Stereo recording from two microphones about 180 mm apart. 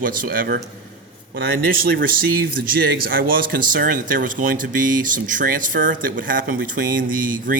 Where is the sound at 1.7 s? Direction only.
55° right (ahead or behind).